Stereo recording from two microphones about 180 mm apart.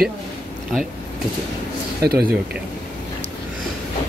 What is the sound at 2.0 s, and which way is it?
Speech, 60° right (ahead or behind).